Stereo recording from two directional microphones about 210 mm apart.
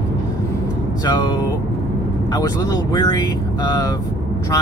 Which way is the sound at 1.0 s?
20° left (ahead or behind).